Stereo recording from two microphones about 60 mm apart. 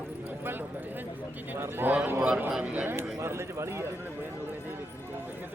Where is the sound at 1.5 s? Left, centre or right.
Right.